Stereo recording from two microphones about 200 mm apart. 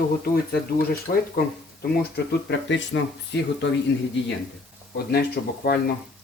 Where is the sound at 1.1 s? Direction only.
40° left (ahead or behind).